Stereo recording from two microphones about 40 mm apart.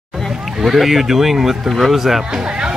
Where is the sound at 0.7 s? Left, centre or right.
Centre.